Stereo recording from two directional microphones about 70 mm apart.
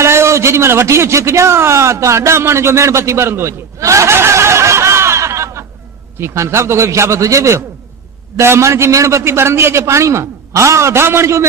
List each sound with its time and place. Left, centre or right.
0.0 s a man's voice: right